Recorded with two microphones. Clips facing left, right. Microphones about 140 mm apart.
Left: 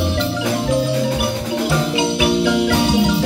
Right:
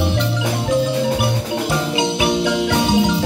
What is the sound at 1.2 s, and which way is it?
Music, 20° right (ahead or behind).